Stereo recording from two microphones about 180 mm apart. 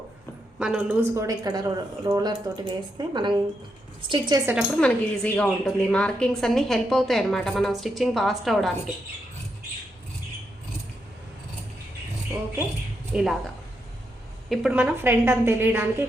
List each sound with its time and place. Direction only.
0.6 s a woman's voice: 5° right (ahead or behind); by 4.5 s 20° right (ahead or behind)
4.8 s a woman's voice: 5° left (ahead or behind)
13.1 s a woman's voice: 5° right (ahead or behind)
14.5 s a woman's voice: 5° right (ahead or behind)